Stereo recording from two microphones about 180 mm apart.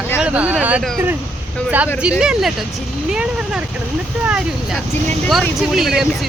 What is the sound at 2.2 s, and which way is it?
Speech, 5° right (ahead or behind).